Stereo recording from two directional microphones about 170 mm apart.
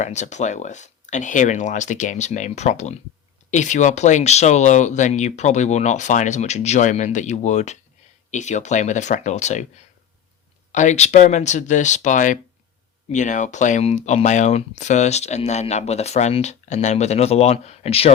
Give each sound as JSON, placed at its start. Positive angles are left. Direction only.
{"t": 0.0, "sound": "speech", "side_deg": 45}